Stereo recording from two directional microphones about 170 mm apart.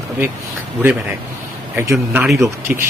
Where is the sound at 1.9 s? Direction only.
5° right (ahead or behind).